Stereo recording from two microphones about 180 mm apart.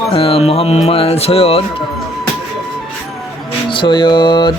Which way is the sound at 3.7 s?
25° left (ahead or behind).